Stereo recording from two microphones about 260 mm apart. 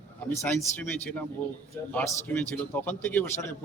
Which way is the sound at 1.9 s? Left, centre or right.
Centre.